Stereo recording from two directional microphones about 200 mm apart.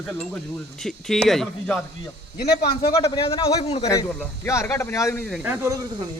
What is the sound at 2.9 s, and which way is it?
Speech, 20° left (ahead or behind).